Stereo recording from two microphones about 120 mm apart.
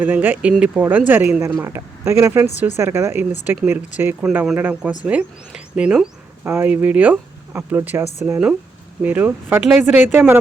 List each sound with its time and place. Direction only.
0.0 s speech: 15° right (ahead or behind)
9.6 s a woman's voice: 5° right (ahead or behind)
9.8 s speech: 15° right (ahead or behind)